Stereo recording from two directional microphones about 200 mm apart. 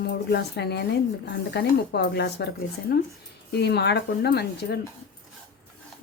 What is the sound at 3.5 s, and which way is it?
Speech, 55° left (ahead or behind).